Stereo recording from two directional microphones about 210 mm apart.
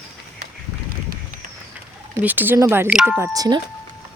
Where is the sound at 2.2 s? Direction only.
10° right (ahead or behind).